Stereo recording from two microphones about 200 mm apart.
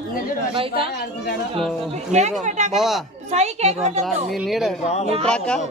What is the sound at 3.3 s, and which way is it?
Speech, 35° right (ahead or behind).